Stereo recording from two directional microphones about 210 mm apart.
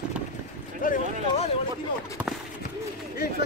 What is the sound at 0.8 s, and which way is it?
Speech, 40° left (ahead or behind).